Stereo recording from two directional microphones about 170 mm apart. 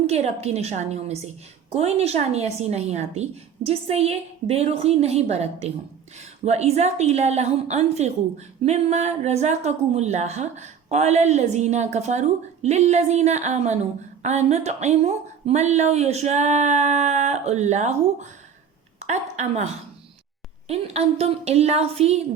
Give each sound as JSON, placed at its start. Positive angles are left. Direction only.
{"t": 0.1, "sound": "a woman's voice", "side_deg": -40}